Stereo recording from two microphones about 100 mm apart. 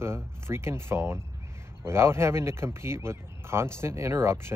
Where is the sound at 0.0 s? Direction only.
25° right (ahead or behind).